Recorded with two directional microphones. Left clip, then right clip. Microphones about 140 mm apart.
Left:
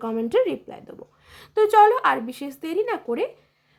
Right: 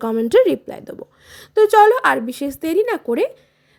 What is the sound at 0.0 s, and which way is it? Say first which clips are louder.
A woman's voice: right 8 dB; 35° right (ahead or behind).